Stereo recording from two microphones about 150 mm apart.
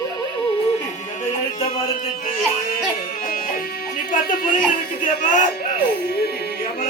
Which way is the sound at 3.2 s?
70° left (ahead or behind).